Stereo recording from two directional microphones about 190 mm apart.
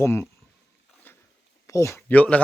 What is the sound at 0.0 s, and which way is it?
Speech, 15° left (ahead or behind).